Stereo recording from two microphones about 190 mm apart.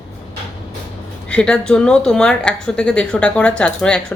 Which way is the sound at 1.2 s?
5° left (ahead or behind).